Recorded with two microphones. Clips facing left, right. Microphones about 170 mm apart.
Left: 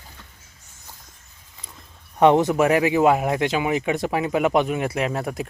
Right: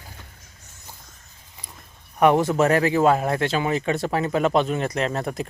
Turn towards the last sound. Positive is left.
turn(degrees=10)  # may be behind; listen again after turning